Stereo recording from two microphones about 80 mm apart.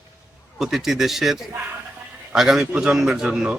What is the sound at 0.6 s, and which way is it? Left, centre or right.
Speech, centre.